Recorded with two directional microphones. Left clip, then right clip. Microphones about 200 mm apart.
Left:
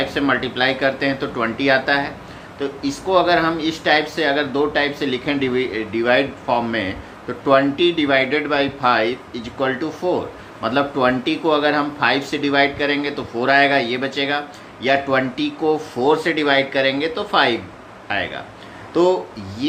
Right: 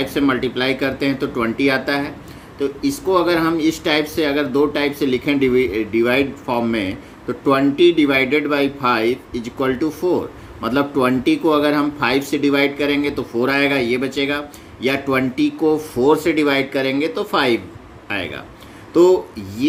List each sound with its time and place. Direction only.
0.0 s speech: 25° right (ahead or behind)